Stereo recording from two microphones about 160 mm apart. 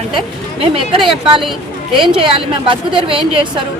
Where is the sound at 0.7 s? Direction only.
30° right (ahead or behind).